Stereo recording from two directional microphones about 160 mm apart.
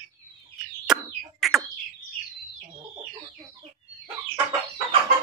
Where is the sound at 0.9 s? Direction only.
5° right (ahead or behind).